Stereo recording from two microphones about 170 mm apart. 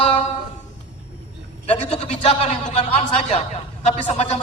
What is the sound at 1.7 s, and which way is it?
A man's voice, 35° left (ahead or behind).